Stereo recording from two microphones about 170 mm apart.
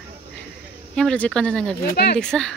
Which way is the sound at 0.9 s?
5° left (ahead or behind).